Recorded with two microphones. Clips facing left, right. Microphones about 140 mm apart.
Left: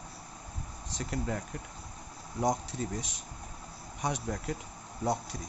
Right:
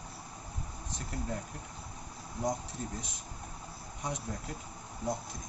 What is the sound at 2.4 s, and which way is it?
Speech, 90° left.